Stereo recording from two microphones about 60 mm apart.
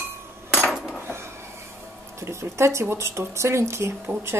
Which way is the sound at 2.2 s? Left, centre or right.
Right.